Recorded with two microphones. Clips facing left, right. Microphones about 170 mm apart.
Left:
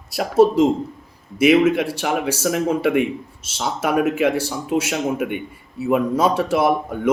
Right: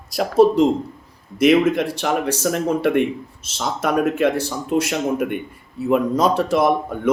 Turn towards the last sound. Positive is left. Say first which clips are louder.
# right 1 dB
turn(degrees=5)  # may be behind; listen again after turning